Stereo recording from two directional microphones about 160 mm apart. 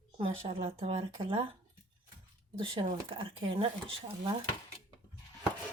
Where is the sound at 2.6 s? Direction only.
30° right (ahead or behind).